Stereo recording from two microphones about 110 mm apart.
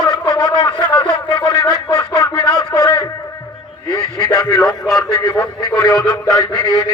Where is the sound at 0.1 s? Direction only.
40° left (ahead or behind).